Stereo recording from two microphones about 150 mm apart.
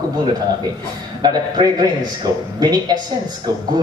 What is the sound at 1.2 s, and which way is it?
Speech, 30° right (ahead or behind).